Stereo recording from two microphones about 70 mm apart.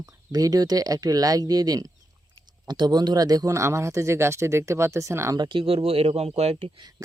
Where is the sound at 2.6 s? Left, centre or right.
Right.